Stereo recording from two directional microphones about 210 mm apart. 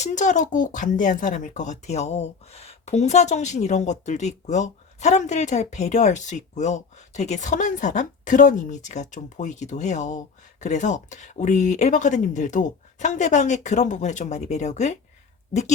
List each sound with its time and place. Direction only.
0.0 s speech: 35° left (ahead or behind)